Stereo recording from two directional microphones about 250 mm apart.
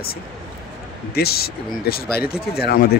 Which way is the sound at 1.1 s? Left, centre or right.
Left.